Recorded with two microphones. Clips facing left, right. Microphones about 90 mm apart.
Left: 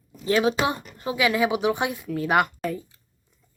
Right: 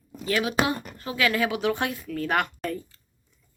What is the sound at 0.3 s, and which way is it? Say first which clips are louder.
Speech: left 3 dB; 25° left (ahead or behind).